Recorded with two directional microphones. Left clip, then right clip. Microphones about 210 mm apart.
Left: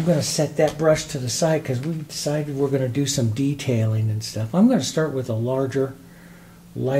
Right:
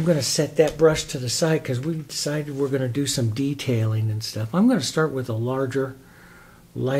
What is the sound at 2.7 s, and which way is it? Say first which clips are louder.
Speech: left 2 dB; 25° right (ahead or behind).